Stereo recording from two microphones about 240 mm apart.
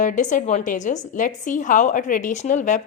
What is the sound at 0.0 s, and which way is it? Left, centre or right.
A woman's voice, left.